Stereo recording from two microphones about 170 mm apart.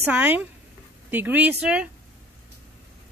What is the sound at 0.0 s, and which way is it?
Speech, 10° right (ahead or behind).